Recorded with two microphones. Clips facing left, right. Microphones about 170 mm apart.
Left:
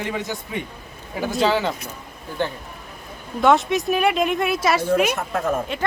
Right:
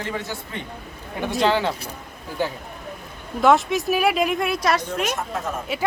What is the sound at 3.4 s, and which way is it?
Speech, centre (ahead or behind).